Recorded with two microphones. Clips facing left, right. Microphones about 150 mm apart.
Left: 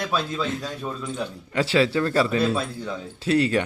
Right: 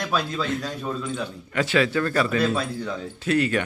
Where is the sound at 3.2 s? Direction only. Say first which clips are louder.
Left 2 dB; 30° left (ahead or behind).